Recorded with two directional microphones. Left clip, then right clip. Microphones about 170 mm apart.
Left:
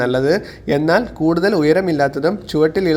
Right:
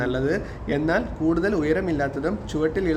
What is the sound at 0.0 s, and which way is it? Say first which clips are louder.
Speech: left 8 dB; 35° left (ahead or behind).